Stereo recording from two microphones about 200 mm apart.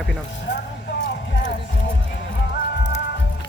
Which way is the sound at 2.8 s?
60° left (ahead or behind).